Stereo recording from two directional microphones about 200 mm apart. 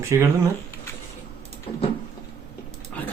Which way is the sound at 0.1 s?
15° right (ahead or behind).